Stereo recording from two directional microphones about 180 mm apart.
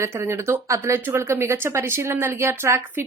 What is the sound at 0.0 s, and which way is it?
Speech, 15° right (ahead or behind).